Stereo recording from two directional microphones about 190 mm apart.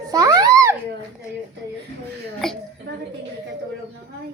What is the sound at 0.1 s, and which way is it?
Babbling, 20° right (ahead or behind).